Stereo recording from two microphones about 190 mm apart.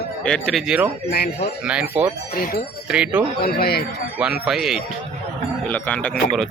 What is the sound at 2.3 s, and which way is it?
Speech, 50° left (ahead or behind).